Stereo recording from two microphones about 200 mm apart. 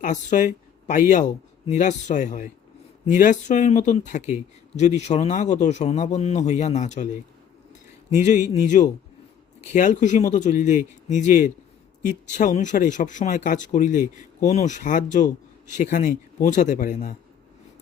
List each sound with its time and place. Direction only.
0.0 s speech: 40° left (ahead or behind)